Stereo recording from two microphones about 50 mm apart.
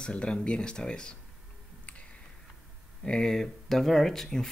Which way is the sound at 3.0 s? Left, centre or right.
Centre.